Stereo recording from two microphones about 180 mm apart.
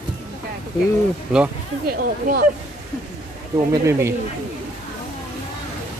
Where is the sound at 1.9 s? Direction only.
55° right (ahead or behind).